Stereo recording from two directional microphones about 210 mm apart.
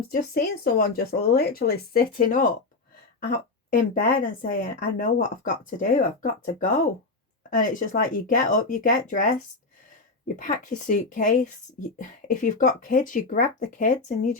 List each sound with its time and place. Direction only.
0.1 s speech: 45° left (ahead or behind)
3.8 s speech: 40° left (ahead or behind)